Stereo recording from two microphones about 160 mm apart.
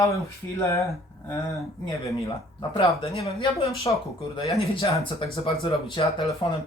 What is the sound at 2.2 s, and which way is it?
Speech, 25° left (ahead or behind).